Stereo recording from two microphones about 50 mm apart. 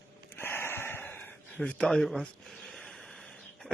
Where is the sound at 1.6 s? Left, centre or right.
Centre.